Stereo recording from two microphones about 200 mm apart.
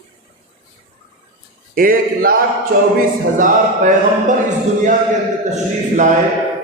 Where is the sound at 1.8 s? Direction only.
45° right (ahead or behind).